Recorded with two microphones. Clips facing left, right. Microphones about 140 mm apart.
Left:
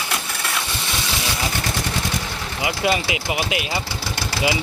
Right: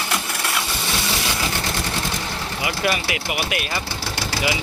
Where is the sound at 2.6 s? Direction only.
20° left (ahead or behind).